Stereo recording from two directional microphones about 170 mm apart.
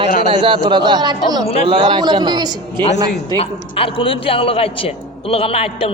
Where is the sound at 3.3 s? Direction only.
35° left (ahead or behind).